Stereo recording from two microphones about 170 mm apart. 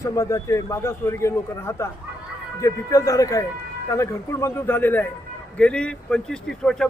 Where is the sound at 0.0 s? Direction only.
20° left (ahead or behind).